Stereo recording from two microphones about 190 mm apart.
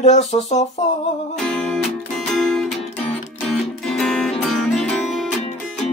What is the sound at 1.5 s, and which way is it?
Music, centre (ahead or behind).